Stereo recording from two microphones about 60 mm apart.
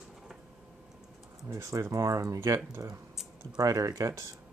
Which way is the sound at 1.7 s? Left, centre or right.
Right.